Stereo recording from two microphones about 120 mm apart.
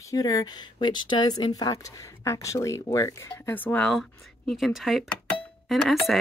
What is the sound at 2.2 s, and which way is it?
Speech, 25° left (ahead or behind).